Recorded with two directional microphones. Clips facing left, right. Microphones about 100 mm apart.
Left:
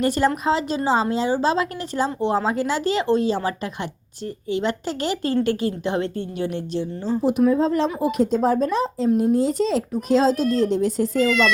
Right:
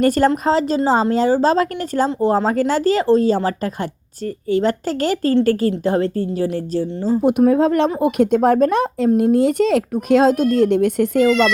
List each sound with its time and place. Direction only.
0.0 s a woman's voice: 45° right (ahead or behind)
7.2 s speech: 60° right (ahead or behind)
11.3 s a woman's voice: 40° right (ahead or behind)